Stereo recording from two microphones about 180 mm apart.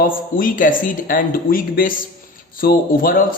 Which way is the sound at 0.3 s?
50° left (ahead or behind).